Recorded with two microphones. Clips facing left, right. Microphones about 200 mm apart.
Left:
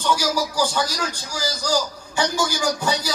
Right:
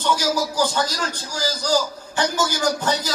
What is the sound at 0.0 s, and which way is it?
A man's voice, 10° left (ahead or behind).